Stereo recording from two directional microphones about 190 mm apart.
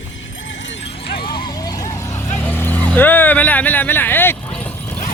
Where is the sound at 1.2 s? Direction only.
25° left (ahead or behind); by 5.0 s 10° left (ahead or behind).